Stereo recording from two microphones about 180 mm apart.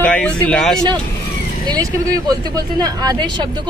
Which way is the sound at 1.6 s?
20° right (ahead or behind).